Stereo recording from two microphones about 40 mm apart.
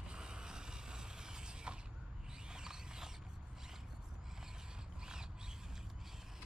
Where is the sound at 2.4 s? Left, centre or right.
Centre.